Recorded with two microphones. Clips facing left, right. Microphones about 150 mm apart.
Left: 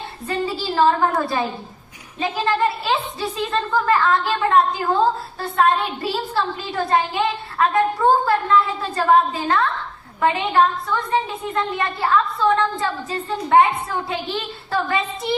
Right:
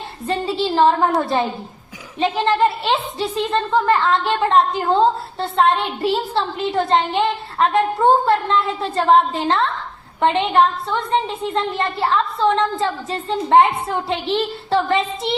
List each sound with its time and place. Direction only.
0.3 s a woman's voice: 25° right (ahead or behind)